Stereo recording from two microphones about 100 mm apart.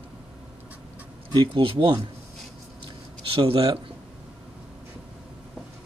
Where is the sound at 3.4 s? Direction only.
70° right (ahead or behind).